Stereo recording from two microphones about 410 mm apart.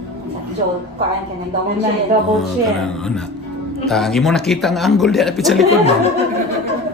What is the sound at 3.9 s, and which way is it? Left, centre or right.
Speech, centre.